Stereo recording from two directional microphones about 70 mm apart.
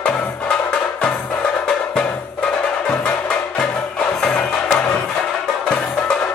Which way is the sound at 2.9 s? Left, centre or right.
Centre.